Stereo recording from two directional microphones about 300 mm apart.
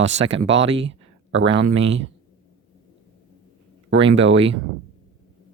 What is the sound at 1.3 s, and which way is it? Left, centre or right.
Speech, right.